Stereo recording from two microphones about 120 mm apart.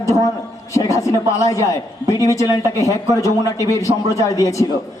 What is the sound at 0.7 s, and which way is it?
Speech, 25° left (ahead or behind).